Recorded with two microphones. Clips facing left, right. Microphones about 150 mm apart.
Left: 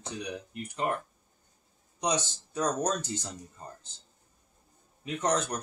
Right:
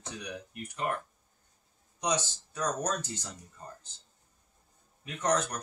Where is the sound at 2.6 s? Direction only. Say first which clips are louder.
Left 3 dB; 20° left (ahead or behind).